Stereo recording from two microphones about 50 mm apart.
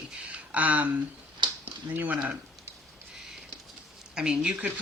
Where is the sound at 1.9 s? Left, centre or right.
Right.